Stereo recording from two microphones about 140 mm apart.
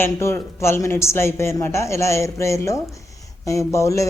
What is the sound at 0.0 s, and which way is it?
Speech, 20° left (ahead or behind).